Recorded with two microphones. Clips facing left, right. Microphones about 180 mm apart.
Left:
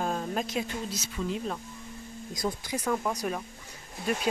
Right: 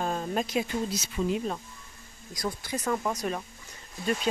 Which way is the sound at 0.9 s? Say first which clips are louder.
Right 4 dB; 10° right (ahead or behind).